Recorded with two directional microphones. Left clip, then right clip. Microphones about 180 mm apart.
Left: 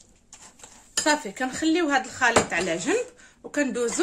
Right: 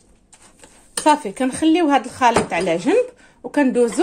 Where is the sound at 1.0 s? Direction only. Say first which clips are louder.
Right 8 dB; 25° right (ahead or behind).